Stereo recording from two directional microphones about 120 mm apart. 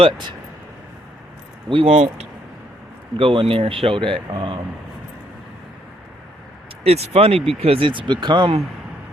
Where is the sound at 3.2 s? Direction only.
45° right (ahead or behind).